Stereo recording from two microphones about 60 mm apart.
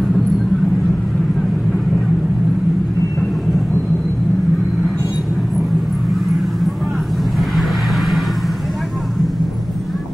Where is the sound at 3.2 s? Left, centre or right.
Centre.